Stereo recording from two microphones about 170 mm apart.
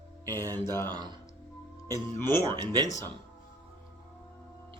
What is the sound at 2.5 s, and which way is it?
Speech, 25° right (ahead or behind).